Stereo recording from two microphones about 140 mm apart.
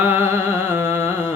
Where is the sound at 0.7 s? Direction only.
15° right (ahead or behind).